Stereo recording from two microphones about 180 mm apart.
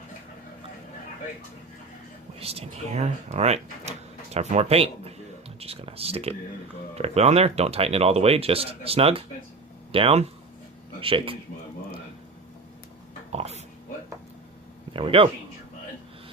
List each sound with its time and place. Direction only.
2.4 s a man's voice: 35° right (ahead or behind)
13.3 s oink: 35° right (ahead or behind)
14.9 s speech: 30° right (ahead or behind)